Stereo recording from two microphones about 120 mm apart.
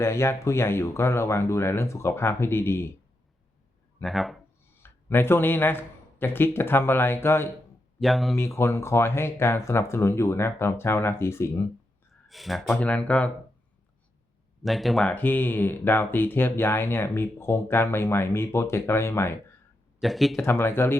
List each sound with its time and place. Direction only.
0.0 s speech: 20° left (ahead or behind)
4.0 s speech: centre (ahead or behind)
4.8 s speech: 20° left (ahead or behind)
7.9 s speech: centre (ahead or behind)
8.4 s speech: 20° left (ahead or behind)
12.3 s speech: centre (ahead or behind)
14.6 s speech: centre (ahead or behind)
15.1 s speech: 15° left (ahead or behind)
20.0 s speech: centre (ahead or behind)
20.4 s speech: 20° left (ahead or behind)